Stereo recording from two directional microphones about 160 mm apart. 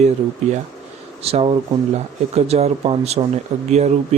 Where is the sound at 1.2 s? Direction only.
40° right (ahead or behind).